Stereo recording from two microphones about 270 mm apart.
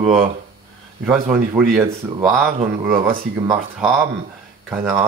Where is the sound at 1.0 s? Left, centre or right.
Centre.